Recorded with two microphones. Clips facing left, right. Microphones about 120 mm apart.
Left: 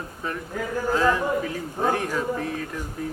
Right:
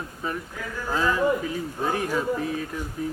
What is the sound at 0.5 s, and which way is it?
Speech, 45° left (ahead or behind).